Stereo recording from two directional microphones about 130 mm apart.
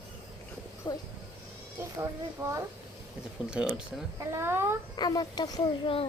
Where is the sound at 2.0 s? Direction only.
20° right (ahead or behind).